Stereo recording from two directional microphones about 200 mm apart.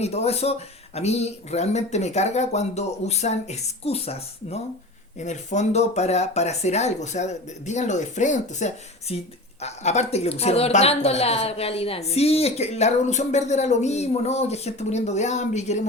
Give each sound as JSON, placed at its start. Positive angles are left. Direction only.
{"t": 0.0, "sound": "speech", "side_deg": 30}